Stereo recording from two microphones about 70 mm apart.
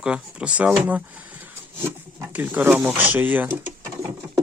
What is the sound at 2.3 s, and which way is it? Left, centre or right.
Speech, right.